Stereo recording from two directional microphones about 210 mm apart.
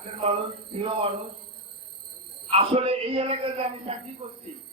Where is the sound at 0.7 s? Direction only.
25° right (ahead or behind).